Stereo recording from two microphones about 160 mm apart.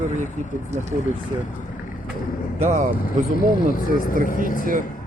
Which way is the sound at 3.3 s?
60° left (ahead or behind).